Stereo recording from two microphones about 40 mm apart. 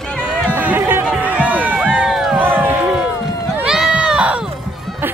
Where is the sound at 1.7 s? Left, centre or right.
Right.